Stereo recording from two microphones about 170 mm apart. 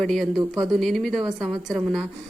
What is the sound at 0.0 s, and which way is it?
Speech, centre (ahead or behind).